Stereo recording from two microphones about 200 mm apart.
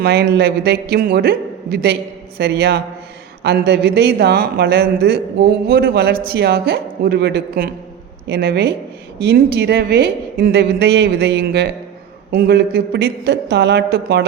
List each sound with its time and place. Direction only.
0.0 s a man's voice: 55° right (ahead or behind)